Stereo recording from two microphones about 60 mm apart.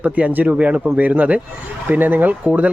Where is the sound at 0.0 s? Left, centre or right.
Right.